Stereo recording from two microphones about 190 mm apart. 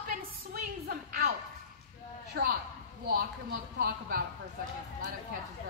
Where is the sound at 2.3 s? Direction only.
60° right (ahead or behind).